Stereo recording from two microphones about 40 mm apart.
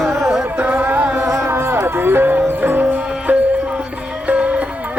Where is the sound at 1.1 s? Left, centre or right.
Right.